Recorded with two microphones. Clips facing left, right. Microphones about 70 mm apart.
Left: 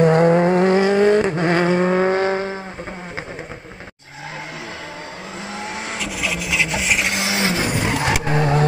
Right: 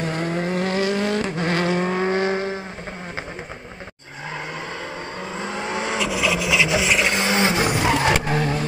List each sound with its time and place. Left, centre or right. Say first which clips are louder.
0.0 s vehicle: left 11 dB; left
0.7 s vehicle: left 6 dB; centre
1.0 s vehicle: left 7 dB; left; by 2.5 s centre
5.4 s vehicle: right 3 dB; centre
7.6 s roar: right 2 dB; centre